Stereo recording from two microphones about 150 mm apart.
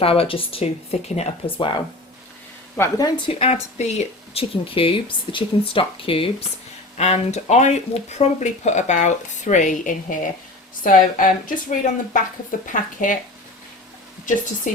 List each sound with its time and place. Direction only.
0.0 s speech: 40° left (ahead or behind)
2.7 s a woman's voice: 20° left (ahead or behind)
3.3 s speech: 45° left (ahead or behind)
6.9 s speech: 45° left (ahead or behind)